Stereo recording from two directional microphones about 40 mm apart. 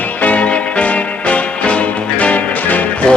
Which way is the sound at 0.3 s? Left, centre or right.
Left.